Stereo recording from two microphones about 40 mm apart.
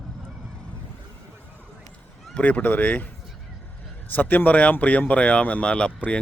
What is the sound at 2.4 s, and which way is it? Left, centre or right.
Speech, left.